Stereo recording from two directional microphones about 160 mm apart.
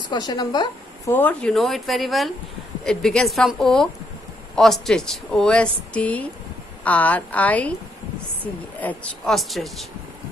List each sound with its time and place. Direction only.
0.1 s a woman's voice: 25° left (ahead or behind)
1.1 s a woman's voice: 10° left (ahead or behind)
8.8 s speech: centre (ahead or behind)